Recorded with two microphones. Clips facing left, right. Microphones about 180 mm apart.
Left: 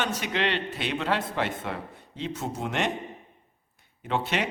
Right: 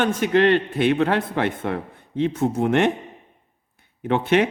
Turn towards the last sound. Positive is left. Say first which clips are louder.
# right 9 dB
turn(degrees=-55)  # may be behind; listen again after turning